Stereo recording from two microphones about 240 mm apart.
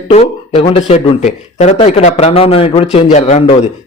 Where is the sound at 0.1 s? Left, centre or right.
Left.